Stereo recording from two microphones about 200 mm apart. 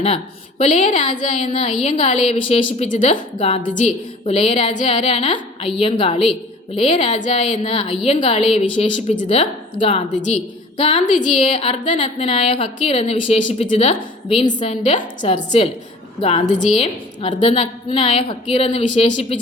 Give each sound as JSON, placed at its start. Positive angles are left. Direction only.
{"t": 0.6, "sound": "a woman's voice", "side_deg": 35}